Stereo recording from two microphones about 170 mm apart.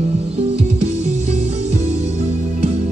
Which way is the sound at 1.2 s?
40° right (ahead or behind).